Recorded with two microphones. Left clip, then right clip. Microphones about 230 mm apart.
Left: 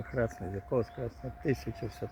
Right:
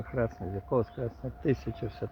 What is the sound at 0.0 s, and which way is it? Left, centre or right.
Speech, centre.